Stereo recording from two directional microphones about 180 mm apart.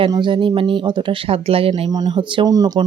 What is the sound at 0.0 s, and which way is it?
Speech, 25° right (ahead or behind).